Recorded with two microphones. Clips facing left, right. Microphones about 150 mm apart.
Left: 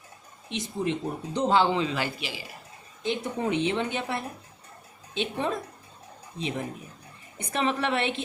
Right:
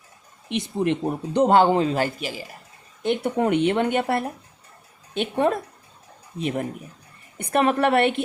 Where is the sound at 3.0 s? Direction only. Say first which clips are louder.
Right 7 dB; 60° right (ahead or behind).